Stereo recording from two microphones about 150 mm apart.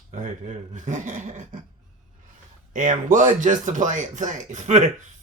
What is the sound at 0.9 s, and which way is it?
Speech, 55° right (ahead or behind).